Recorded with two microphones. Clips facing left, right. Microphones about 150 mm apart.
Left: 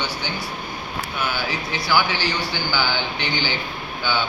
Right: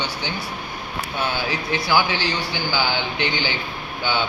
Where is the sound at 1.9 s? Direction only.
20° right (ahead or behind).